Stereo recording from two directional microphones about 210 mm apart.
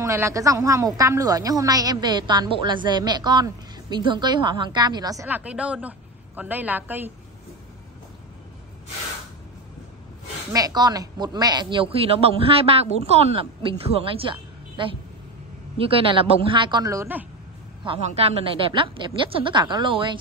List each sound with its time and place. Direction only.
0.0 s a woman's voice: 15° right (ahead or behind)
10.5 s speech: 20° right (ahead or behind)
16.1 s speech: 25° right (ahead or behind)
17.8 s speech: 25° right (ahead or behind)